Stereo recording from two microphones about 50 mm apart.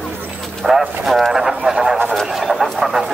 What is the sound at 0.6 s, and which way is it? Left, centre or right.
Speech, centre.